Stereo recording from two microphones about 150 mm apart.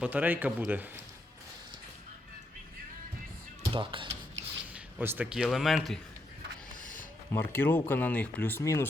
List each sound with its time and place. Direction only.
0.0 s speech: 10° right (ahead or behind)
3.7 s speech: 35° right (ahead or behind)
4.7 s a man's voice: 10° right (ahead or behind)
6.9 s speech: 15° left (ahead or behind)